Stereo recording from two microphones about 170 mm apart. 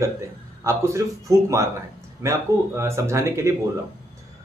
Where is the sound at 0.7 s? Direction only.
15° right (ahead or behind).